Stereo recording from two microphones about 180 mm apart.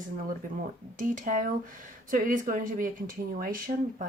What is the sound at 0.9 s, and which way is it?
Speech, 45° right (ahead or behind).